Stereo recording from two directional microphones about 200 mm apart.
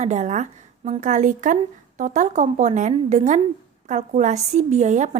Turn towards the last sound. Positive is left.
turn(degrees=-35)  # may be behind; listen again after turning